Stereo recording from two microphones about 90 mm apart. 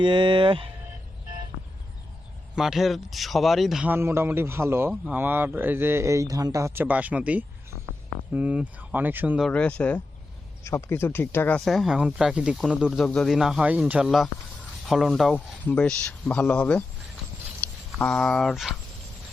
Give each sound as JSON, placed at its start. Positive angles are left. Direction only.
{"t": 0.0, "sound": "speech", "side_deg": -60}
{"t": 2.6, "sound": "speech", "side_deg": -5}
{"t": 3.8, "sound": "speech", "side_deg": -25}
{"t": 6.8, "sound": "speech", "side_deg": -15}
{"t": 9.5, "sound": "speech", "side_deg": 15}
{"t": 10.6, "sound": "speech", "side_deg": 30}
{"t": 11.6, "sound": "speech", "side_deg": 0}
{"t": 13.7, "sound": "speech", "side_deg": -15}
{"t": 14.0, "sound": "speech", "side_deg": 0}
{"t": 15.6, "sound": "speech", "side_deg": 15}
{"t": 17.6, "sound": "a sound", "side_deg": 20}
{"t": 18.0, "sound": "speech", "side_deg": 10}